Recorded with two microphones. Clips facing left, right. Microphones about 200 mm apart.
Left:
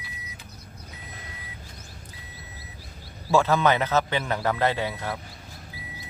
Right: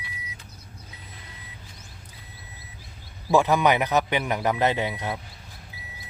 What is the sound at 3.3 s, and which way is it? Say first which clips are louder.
Speech: right 1 dB; 15° right (ahead or behind).